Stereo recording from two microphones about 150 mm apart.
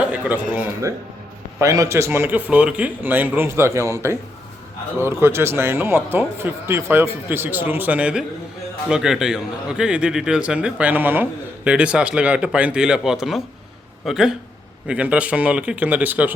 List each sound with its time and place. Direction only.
0.1 s a man's voice: 10° right (ahead or behind)